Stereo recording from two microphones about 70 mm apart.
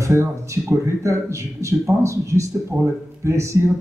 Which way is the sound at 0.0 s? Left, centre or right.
Right.